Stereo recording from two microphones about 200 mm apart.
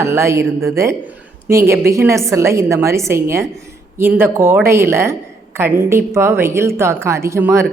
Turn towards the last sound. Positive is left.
turn(degrees=-15)  # may be behind; listen again after turning